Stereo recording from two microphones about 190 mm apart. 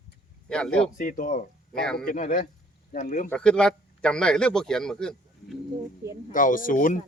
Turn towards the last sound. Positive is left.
turn(degrees=45)  # may be behind; listen again after turning